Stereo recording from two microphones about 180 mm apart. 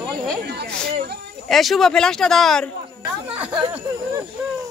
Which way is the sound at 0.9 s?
65° right (ahead or behind).